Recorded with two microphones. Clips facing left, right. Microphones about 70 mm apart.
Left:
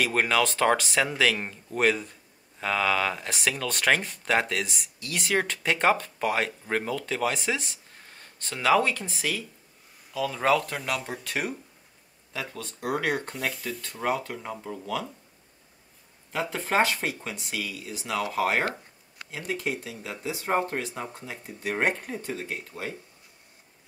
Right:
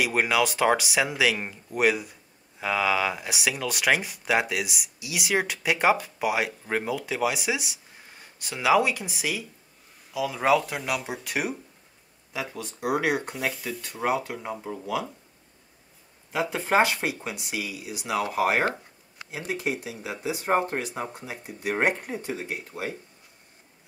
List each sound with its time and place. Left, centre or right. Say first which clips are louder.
0.0 s speech: right 1 dB; centre
16.3 s speech: right 3 dB; centre